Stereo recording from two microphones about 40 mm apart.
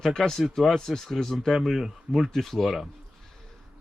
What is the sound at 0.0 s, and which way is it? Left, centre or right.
Speech, centre.